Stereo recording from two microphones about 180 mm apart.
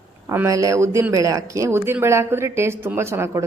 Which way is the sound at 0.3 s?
15° right (ahead or behind).